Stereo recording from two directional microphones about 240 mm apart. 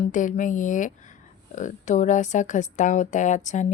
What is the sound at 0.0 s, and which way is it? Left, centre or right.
Speech, left.